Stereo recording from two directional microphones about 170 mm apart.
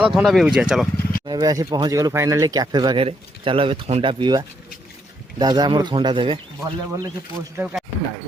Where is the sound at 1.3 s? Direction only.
20° right (ahead or behind).